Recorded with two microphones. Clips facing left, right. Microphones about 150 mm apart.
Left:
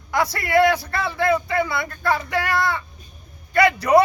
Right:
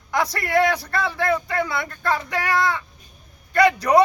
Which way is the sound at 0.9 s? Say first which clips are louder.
Left 1 dB; 10° left (ahead or behind).